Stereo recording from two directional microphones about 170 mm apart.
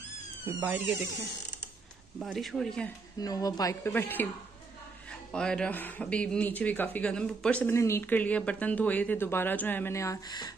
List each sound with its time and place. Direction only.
0.5 s speech: 10° right (ahead or behind)
2.1 s speech: centre (ahead or behind)
3.2 s speech: 20° left (ahead or behind)
5.3 s speech: 5° left (ahead or behind); by 10.5 s 25° left (ahead or behind)